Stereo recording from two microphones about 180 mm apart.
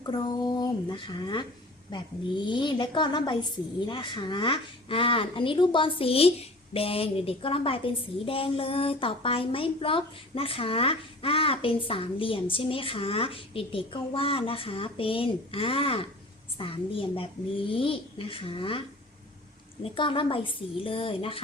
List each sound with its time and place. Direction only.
0.0 s a woman's voice: 25° left (ahead or behind)
19.8 s a woman's voice: 30° left (ahead or behind)